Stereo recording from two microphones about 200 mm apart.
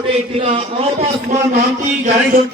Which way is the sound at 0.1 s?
30° right (ahead or behind).